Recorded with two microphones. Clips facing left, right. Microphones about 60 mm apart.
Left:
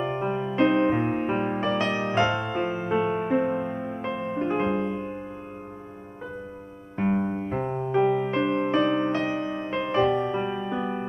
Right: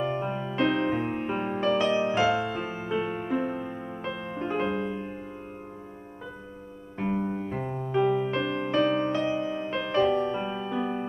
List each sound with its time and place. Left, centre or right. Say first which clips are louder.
0.0 s music: left 2 dB; centre
1.8 s music: even; left
7.0 s music: left 4 dB; left
9.1 s music: left 1 dB; left; by 11.1 s centre